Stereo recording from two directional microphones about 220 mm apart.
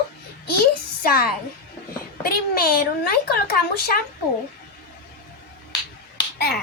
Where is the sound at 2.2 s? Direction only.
40° left (ahead or behind).